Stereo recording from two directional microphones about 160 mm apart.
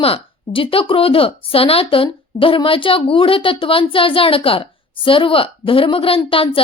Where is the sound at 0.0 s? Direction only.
35° left (ahead or behind).